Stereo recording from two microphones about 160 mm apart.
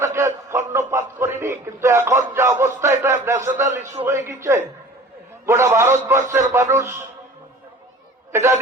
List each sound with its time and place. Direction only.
0.0 s a sound: 15° right (ahead or behind)
4.0 s a man's voice: 15° right (ahead or behind)
8.3 s chatter: 15° right (ahead or behind)